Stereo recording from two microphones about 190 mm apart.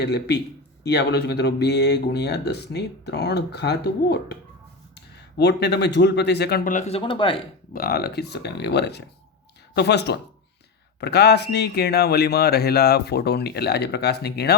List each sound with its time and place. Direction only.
0.0 s speech: 60° left (ahead or behind)
6.7 s speech: 35° left (ahead or behind)
7.7 s speech: 50° left (ahead or behind)